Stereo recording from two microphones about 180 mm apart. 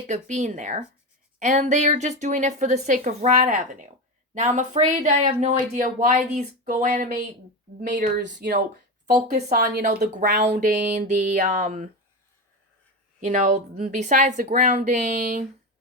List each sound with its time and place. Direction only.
0.1 s a woman's voice: 45° right (ahead or behind)
3.3 s speech: 50° right (ahead or behind)
13.1 s speech: 40° right (ahead or behind)